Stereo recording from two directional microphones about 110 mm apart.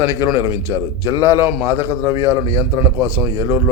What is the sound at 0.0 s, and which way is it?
Speech, 25° right (ahead or behind).